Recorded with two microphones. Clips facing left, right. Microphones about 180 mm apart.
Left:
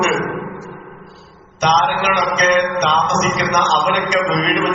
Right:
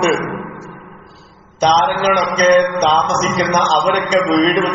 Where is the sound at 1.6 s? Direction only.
30° right (ahead or behind).